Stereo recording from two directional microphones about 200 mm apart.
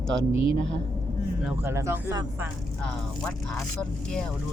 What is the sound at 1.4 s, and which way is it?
Speech, 10° right (ahead or behind).